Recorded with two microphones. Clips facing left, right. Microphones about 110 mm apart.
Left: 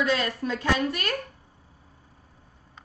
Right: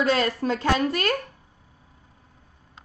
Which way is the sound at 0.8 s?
35° right (ahead or behind).